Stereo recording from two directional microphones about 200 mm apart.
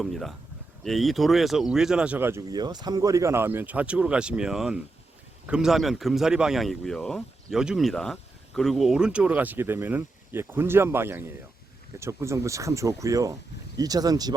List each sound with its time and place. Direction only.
0.0 s speech: centre (ahead or behind); by 14.3 s 20° right (ahead or behind)